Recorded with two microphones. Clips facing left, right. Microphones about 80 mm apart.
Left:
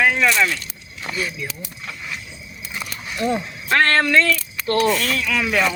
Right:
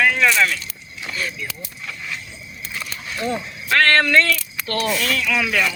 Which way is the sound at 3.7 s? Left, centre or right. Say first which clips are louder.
Right 1 dB; left.